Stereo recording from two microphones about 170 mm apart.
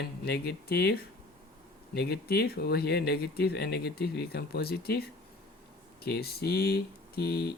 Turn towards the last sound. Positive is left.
turn(degrees=65)  # may be behind; listen again after turning